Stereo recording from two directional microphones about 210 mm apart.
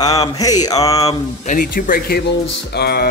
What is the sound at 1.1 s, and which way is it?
Speech, 40° left (ahead or behind).